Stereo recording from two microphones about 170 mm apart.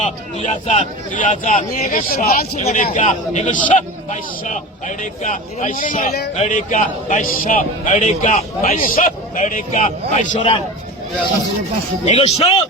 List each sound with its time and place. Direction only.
0.0 s speech: 45° left (ahead or behind); by 2.5 s 60° left (ahead or behind)
2.6 s speech: 40° left (ahead or behind)
8.8 s speech: 55° left (ahead or behind)
12.0 s speech: 40° left (ahead or behind)